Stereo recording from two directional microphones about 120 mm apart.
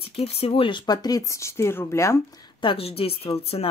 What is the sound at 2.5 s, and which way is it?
Speech, 50° left (ahead or behind).